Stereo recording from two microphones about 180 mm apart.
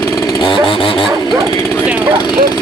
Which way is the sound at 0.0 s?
20° left (ahead or behind).